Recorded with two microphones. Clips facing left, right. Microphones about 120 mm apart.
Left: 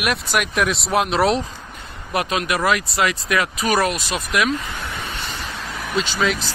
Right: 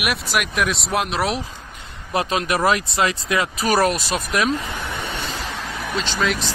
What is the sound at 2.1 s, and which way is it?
Speech, 35° right (ahead or behind).